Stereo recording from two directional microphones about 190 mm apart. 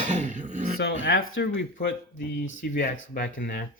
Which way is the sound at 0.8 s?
65° left (ahead or behind).